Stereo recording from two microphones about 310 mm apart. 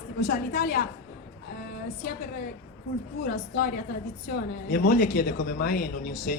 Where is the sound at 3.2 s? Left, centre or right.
Left.